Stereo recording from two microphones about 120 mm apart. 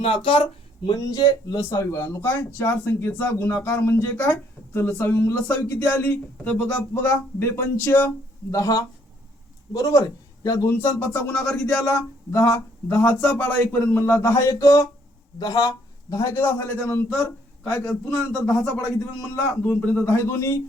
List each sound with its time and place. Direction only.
0.0 s speech: 50° left (ahead or behind)
0.9 s speech: 35° left (ahead or behind); by 11.8 s 15° left (ahead or behind)
12.9 s speech: 15° left (ahead or behind); by 16.3 s 30° left (ahead or behind)
16.3 s speech: 15° left (ahead or behind)
17.8 s speech: 5° left (ahead or behind)
19.7 s speech: 10° left (ahead or behind)